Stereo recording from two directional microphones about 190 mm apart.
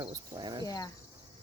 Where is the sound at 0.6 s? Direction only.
20° left (ahead or behind).